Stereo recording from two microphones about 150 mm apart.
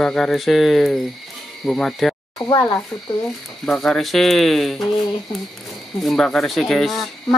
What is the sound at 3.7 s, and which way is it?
Speech, centre (ahead or behind).